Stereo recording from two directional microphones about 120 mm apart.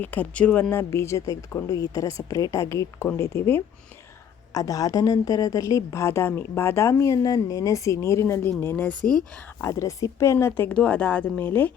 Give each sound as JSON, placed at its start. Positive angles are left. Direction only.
{"t": 0.0, "sound": "speech", "side_deg": 15}
{"t": 9.6, "sound": "speech", "side_deg": 25}